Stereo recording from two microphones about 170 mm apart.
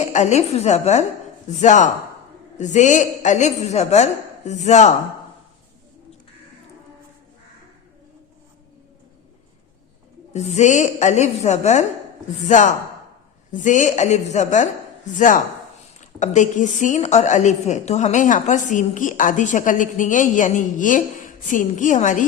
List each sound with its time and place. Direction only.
0.0 s a woman's voice: 45° left (ahead or behind)
10.3 s a woman's voice: 40° left (ahead or behind)